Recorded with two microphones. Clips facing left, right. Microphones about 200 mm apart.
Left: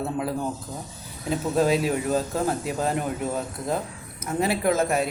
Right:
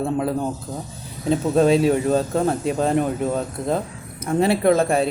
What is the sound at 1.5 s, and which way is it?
Speech, 25° right (ahead or behind).